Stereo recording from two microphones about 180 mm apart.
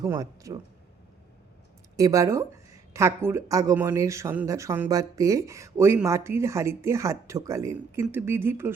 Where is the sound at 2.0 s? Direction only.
20° right (ahead or behind).